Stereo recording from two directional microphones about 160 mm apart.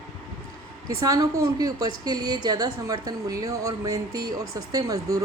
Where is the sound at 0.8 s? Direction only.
20° right (ahead or behind).